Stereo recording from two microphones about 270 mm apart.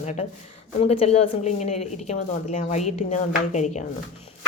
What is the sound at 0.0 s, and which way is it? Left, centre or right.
Speech, left.